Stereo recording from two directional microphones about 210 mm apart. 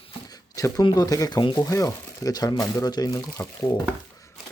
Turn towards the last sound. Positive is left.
turn(degrees=15)  # may be behind; listen again after turning